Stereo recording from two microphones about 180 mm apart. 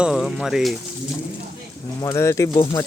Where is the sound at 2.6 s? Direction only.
30° left (ahead or behind).